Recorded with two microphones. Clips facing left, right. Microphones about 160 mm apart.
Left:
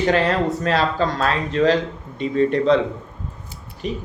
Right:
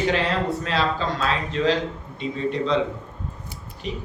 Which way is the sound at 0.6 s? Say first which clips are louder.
Left 4 dB; 50° left (ahead or behind).